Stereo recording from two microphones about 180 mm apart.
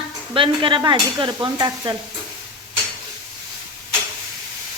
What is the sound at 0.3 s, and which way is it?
Stir, 30° right (ahead or behind).